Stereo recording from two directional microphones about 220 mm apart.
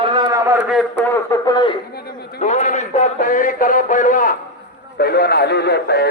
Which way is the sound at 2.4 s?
30° left (ahead or behind).